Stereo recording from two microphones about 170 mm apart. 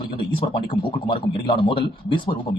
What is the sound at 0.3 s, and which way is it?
A man's voice, 30° left (ahead or behind).